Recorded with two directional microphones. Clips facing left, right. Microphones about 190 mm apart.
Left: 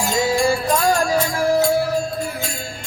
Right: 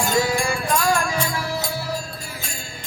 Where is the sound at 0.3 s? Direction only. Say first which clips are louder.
Left 5 dB; 35° left (ahead or behind); by 1.6 s 50° left (ahead or behind).